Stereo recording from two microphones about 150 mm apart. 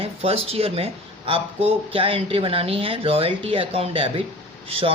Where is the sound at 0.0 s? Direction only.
40° right (ahead or behind).